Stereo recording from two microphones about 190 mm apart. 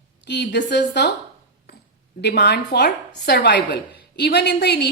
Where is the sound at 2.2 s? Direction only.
60° left (ahead or behind).